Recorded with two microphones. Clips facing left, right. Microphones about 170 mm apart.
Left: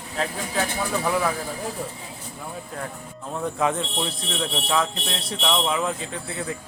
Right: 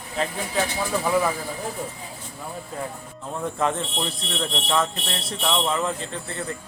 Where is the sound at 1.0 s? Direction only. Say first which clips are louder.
Right 2 dB; centre (ahead or behind).